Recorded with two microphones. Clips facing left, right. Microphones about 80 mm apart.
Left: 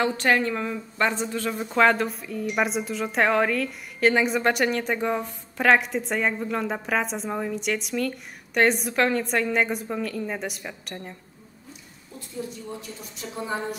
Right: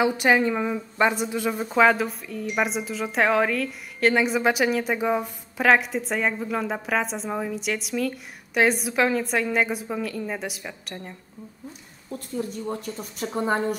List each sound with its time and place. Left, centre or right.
0.0 s a woman's voice: centre
12.4 s a woman's voice: right